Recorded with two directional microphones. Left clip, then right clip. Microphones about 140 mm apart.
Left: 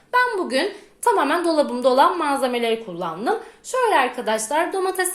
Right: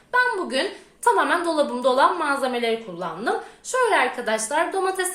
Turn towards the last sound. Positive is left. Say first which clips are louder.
# left 1 dB
turn(degrees=35)  # may be behind; listen again after turning